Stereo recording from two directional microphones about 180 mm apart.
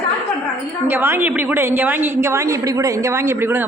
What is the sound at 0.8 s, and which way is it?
A woman's voice, 10° right (ahead or behind).